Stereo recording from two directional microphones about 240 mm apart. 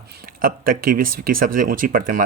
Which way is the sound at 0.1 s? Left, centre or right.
Right.